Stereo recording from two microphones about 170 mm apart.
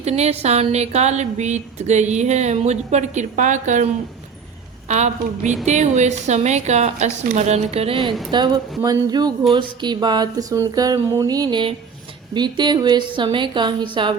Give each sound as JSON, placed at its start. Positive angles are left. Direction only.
{"t": 0.0, "sound": "speech", "side_deg": -40}
{"t": 4.9, "sound": "a woman's voice", "side_deg": -45}